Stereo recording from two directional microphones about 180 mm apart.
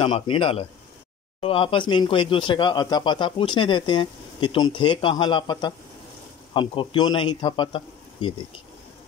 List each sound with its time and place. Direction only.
0.0 s speech: 30° left (ahead or behind)